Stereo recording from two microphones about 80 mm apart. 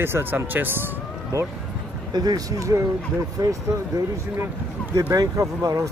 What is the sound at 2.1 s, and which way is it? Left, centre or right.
Speech, right.